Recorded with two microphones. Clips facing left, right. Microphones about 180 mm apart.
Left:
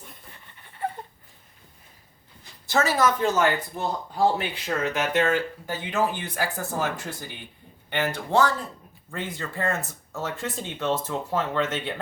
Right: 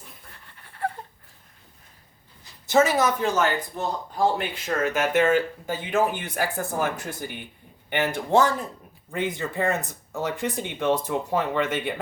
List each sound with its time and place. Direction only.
0.6 s a sound: centre (ahead or behind)
2.6 s speech: 20° right (ahead or behind)
3.4 s speech: 10° left (ahead or behind)
4.6 s speech: 10° right (ahead or behind)